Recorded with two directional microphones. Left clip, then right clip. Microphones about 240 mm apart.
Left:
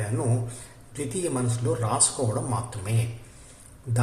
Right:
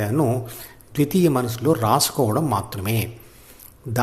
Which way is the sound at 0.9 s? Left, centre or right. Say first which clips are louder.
Right 10 dB; right.